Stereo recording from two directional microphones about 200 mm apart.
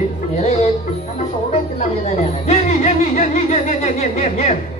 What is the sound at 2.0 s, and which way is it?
Speech, 35° left (ahead or behind).